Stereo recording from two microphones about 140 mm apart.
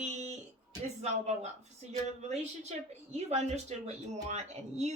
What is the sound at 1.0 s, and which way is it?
Speech, 55° right (ahead or behind).